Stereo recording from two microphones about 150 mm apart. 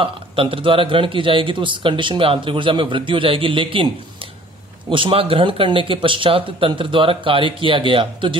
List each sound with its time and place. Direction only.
0.0 s a man's voice: 35° right (ahead or behind)